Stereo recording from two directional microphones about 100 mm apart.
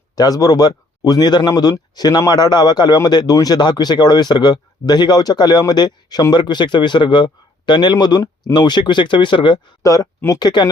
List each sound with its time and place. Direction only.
0.2 s speech: 40° left (ahead or behind)
9.8 s speech: 35° left (ahead or behind)